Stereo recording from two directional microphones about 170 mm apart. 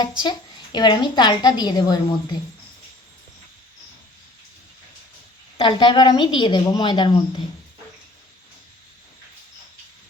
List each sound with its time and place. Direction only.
0.2 s a woman's voice: 25° left (ahead or behind)
5.5 s a woman's voice: 30° left (ahead or behind)